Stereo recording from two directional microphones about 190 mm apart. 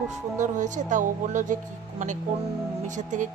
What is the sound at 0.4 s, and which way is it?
Speech, 40° right (ahead or behind).